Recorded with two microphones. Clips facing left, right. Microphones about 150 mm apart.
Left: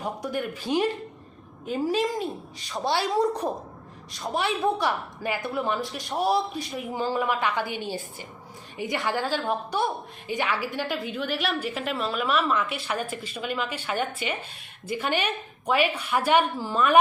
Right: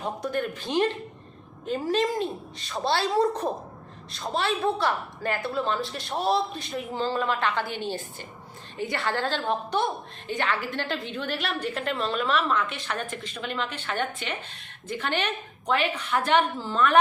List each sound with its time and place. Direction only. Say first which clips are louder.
0.0 s a woman's voice: right 1 dB; 10° left (ahead or behind)